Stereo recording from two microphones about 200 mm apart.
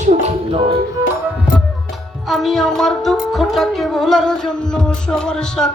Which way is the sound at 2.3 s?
Centre (ahead or behind).